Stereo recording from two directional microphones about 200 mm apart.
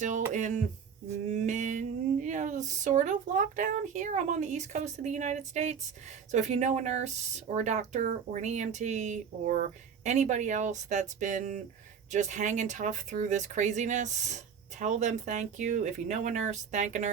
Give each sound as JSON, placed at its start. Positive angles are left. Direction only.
{"t": 0.3, "sound": "speech", "side_deg": -35}
{"t": 1.1, "sound": "a sound", "side_deg": -35}
{"t": 6.3, "sound": "speech", "side_deg": -35}